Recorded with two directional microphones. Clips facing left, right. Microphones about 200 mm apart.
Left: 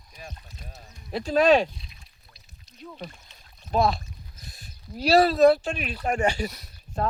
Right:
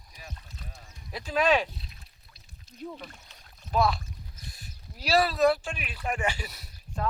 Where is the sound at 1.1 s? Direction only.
40° left (ahead or behind).